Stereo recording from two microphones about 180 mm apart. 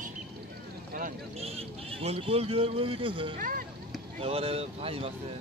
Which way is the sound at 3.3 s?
50° right (ahead or behind).